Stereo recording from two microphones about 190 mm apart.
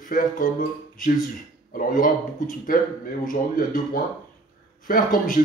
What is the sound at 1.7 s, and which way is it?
A man's voice, 45° left (ahead or behind).